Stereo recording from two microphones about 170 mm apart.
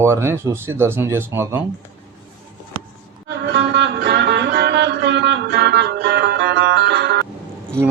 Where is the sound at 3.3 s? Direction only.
90° right.